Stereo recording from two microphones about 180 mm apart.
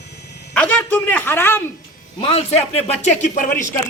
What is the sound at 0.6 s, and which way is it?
A man's voice, 10° left (ahead or behind).